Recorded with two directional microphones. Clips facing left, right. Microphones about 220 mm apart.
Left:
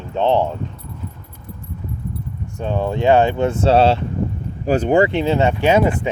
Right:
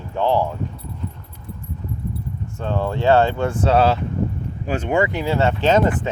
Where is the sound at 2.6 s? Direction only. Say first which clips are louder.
Left 2 dB; 15° left (ahead or behind).